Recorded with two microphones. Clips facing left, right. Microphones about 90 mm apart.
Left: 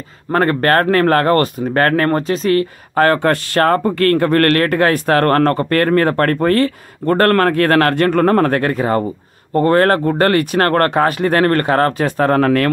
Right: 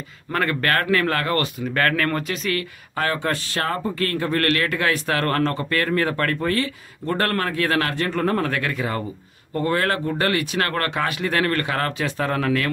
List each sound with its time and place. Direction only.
0.3 s speech: 40° left (ahead or behind)
3.0 s speech: 55° left (ahead or behind)